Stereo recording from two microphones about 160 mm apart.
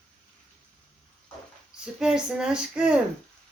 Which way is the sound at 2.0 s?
5° right (ahead or behind).